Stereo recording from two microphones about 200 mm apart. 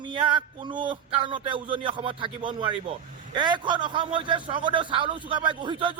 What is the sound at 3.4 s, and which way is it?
A man's voice, 20° right (ahead or behind).